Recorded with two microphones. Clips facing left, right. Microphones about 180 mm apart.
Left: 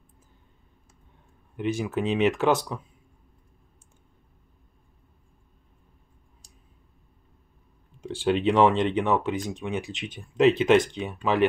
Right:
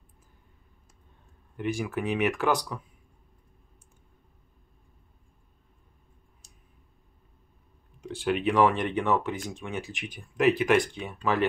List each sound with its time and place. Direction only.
1.6 s speech: 20° left (ahead or behind)
8.0 s speech: 30° left (ahead or behind)